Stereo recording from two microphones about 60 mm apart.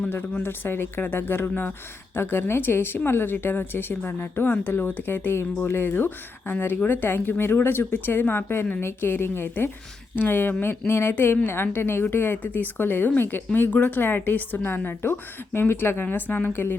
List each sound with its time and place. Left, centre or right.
0.4 s speech: left